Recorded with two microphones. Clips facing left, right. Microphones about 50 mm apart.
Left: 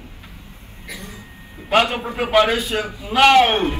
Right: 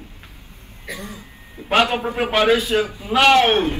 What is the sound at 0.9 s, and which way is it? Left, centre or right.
A man's voice, right.